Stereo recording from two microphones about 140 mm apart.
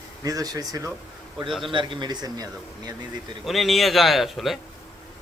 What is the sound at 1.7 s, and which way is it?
Speech, 35° right (ahead or behind).